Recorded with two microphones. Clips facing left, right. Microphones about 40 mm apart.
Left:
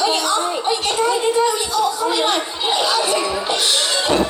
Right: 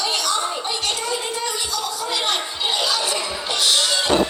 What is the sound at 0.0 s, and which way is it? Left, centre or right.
Music, left.